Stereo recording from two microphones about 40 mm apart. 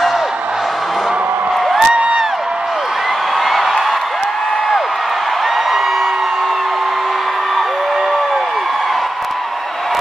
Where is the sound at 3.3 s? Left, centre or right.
Centre.